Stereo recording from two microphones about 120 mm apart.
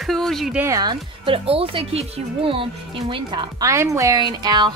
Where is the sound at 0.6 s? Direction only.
25° right (ahead or behind).